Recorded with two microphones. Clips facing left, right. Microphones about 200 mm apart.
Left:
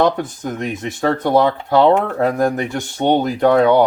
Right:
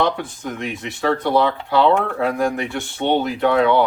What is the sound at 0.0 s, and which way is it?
Speech, 45° left (ahead or behind).